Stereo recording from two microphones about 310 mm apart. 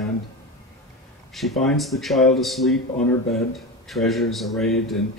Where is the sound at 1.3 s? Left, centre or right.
Centre.